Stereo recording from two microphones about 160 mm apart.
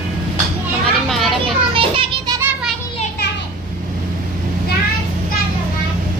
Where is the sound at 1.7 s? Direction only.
35° right (ahead or behind).